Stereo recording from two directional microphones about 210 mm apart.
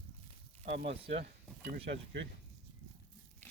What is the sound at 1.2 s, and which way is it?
Speech, 50° right (ahead or behind).